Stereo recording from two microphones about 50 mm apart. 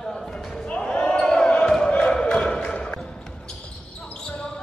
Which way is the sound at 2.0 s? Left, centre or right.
Centre.